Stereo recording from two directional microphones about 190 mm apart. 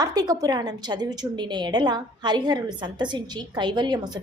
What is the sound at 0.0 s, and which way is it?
A woman's voice, 20° right (ahead or behind).